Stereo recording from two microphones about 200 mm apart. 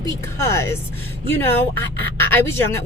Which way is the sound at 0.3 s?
15° left (ahead or behind).